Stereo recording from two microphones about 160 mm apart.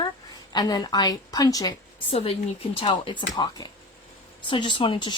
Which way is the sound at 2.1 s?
35° left (ahead or behind).